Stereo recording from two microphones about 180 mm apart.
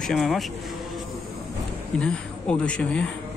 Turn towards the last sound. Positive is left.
turn(degrees=5)  # may be behind; listen again after turning